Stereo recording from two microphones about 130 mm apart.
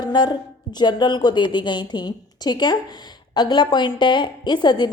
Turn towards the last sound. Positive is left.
turn(degrees=35)  # may be behind; listen again after turning